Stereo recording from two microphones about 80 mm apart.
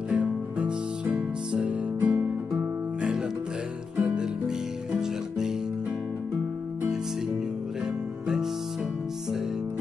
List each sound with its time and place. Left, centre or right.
0.1 s music: centre